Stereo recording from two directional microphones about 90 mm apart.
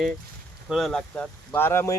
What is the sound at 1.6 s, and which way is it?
Speech, 25° left (ahead or behind).